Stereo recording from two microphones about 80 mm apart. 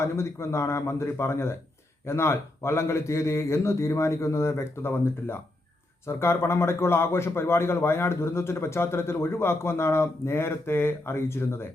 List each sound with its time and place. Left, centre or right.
0.0 s a man's voice: left